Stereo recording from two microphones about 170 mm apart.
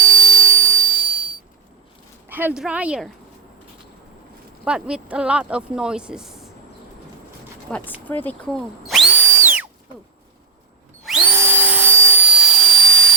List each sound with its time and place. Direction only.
0.0 s a sound: 20° right (ahead or behind)
2.3 s speech: 10° right (ahead or behind)
4.6 s speech: 5° right (ahead or behind)
7.7 s speech: 5° left (ahead or behind)
9.3 s a sound: 10° right (ahead or behind)
11.3 s vacuum cleaner: 10° right (ahead or behind); by 13.1 s 5° left (ahead or behind)